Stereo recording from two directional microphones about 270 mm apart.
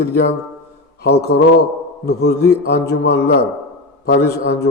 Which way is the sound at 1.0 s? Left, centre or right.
Left.